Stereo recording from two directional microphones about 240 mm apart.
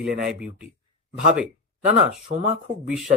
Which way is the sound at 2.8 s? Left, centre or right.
Centre.